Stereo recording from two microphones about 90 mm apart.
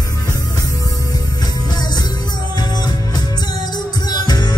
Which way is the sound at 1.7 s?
50° left (ahead or behind).